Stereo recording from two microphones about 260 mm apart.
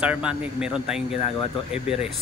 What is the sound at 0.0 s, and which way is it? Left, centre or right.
A man's voice, centre.